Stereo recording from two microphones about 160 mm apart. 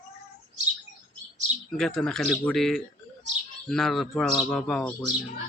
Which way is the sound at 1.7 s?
Centre (ahead or behind).